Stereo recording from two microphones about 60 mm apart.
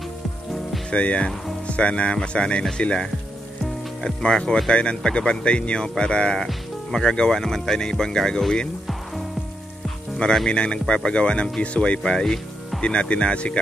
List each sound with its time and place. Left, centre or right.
0.8 s speech: centre